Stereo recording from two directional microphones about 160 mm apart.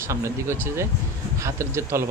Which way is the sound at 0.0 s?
15° right (ahead or behind).